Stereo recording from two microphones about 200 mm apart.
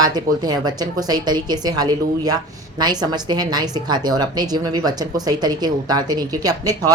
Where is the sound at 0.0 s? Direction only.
20° right (ahead or behind).